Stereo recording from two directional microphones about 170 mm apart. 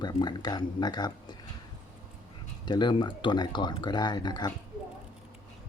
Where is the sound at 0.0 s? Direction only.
25° left (ahead or behind).